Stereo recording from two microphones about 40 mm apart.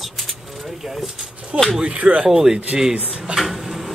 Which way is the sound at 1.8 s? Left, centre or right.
Right.